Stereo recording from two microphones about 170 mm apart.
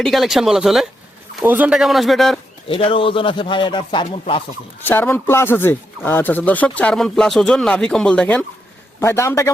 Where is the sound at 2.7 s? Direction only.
30° left (ahead or behind).